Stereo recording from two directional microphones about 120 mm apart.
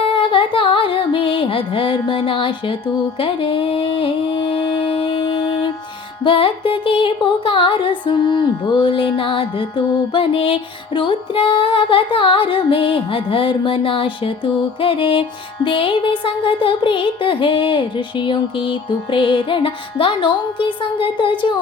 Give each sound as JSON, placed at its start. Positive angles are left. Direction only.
{"t": 0.0, "sound": "music", "side_deg": 45}